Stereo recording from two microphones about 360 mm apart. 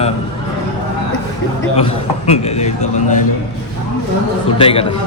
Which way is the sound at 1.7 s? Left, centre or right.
Centre.